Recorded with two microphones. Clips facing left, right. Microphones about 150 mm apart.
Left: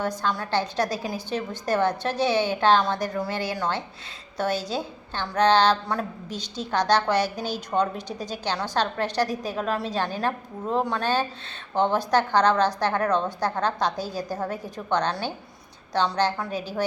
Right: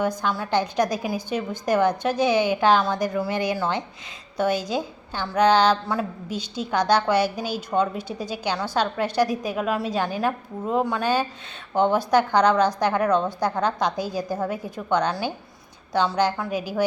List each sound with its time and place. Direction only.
0.0 s a woman's voice: 10° right (ahead or behind)